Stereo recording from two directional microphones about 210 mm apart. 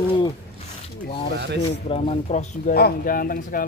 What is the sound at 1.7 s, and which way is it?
Speech, 30° left (ahead or behind).